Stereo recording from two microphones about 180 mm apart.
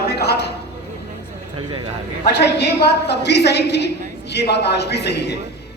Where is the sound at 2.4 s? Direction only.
70° left (ahead or behind).